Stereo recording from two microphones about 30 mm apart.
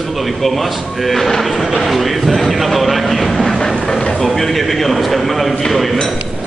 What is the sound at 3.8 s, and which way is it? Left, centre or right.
Speech, centre.